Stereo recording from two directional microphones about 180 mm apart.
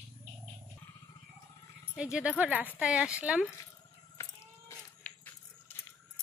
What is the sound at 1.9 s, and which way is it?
Speech, 5° right (ahead or behind).